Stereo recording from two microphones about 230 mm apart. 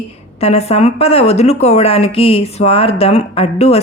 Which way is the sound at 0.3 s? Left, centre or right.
Left.